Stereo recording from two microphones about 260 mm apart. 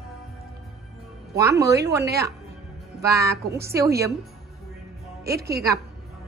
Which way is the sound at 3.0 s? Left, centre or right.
Centre.